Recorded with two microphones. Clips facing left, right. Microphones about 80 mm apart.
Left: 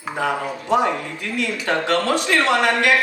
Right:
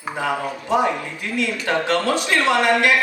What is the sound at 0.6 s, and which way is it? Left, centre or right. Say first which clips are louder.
A woman's voice: left 1 dB; right.